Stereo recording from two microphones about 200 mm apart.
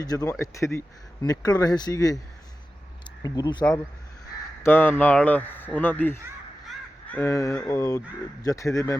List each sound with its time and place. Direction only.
0.0 s speech: 20° left (ahead or behind)
3.2 s speech: 20° left (ahead or behind)